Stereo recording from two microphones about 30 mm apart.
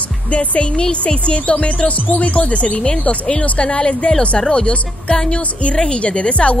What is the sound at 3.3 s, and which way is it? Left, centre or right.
Speech, left.